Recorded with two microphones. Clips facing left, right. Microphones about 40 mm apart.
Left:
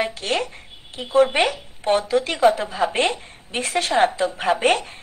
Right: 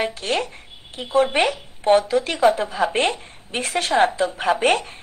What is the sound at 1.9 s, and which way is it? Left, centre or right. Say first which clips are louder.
A woman's voice: right 2 dB; right.